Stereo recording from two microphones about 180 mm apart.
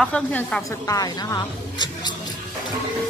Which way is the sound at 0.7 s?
20° left (ahead or behind).